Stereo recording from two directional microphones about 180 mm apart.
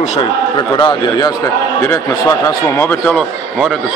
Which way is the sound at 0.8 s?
25° left (ahead or behind).